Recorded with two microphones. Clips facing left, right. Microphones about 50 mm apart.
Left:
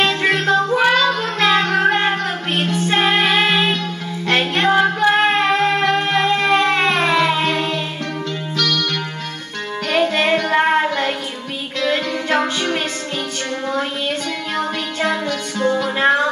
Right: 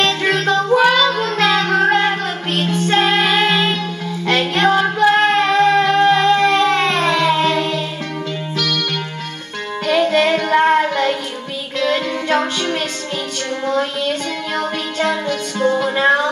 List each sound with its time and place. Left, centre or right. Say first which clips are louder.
0.0 s music: even; centre
0.7 s child singing: right 2 dB; centre
1.7 s child singing: right 1 dB; centre
2.0 s child singing: right 1 dB; left
4.3 s music: right 1 dB; left
7.0 s child singing: right 1 dB; centre
8.5 s music: left 1 dB; centre
9.8 s music: right 2 dB; left
10.5 s child singing: right 4 dB; left
11.8 s music: right 1 dB; centre
13.7 s child singing: right 4 dB; left